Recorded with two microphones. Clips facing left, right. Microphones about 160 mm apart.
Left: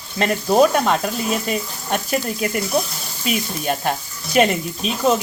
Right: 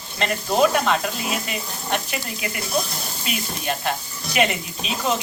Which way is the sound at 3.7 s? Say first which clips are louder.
Left 3 dB; 45° left (ahead or behind).